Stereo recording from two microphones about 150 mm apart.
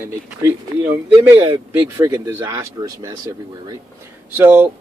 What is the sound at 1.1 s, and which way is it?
Speech, 35° right (ahead or behind).